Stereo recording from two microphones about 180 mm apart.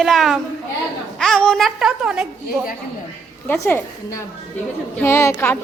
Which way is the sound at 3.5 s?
10° left (ahead or behind).